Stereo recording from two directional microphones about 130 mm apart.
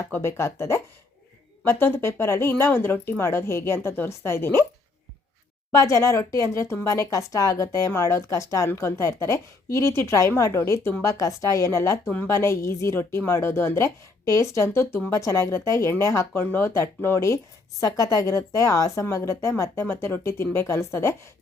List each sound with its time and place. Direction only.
0.1 s speech: 20° left (ahead or behind)
5.7 s speech: 25° left (ahead or behind)